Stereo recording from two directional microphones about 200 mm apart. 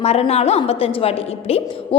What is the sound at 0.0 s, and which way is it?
A woman's voice, 30° left (ahead or behind).